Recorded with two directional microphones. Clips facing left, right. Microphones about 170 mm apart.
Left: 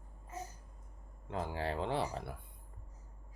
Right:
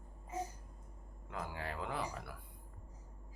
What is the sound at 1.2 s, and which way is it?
Speech, 30° left (ahead or behind).